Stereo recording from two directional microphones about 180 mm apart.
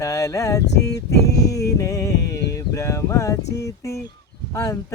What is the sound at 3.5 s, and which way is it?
Speech, 15° left (ahead or behind).